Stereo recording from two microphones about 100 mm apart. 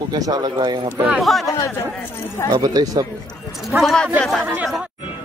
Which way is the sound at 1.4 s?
35° left (ahead or behind).